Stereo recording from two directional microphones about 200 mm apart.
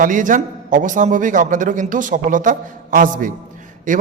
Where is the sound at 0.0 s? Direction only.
40° right (ahead or behind).